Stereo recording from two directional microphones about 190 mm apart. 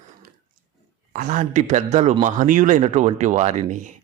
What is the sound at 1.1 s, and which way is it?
Speech, 40° right (ahead or behind).